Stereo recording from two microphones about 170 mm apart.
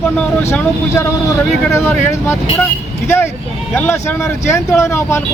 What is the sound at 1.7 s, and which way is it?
Speech, 15° left (ahead or behind).